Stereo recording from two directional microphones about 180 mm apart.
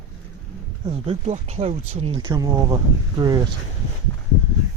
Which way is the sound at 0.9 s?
35° right (ahead or behind).